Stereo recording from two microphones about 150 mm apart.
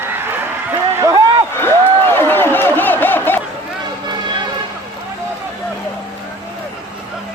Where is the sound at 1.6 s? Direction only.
15° left (ahead or behind).